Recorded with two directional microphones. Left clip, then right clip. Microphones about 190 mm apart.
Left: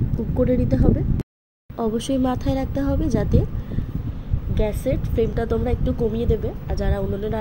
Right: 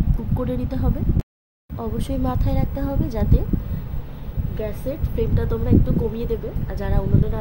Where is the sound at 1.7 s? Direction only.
20° left (ahead or behind).